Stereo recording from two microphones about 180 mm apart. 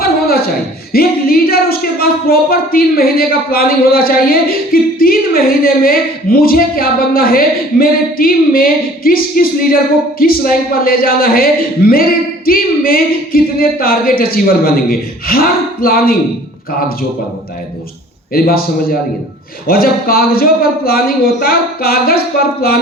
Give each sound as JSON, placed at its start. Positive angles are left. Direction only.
{"t": 0.0, "sound": "a sound", "side_deg": 55}
{"t": 0.9, "sound": "speech", "side_deg": 55}
{"t": 18.3, "sound": "speech", "side_deg": 55}